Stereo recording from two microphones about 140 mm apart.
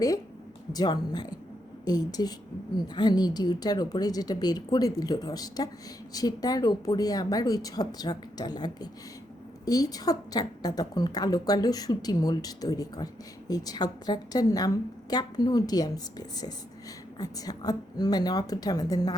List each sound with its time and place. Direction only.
0.7 s a woman's voice: 30° left (ahead or behind)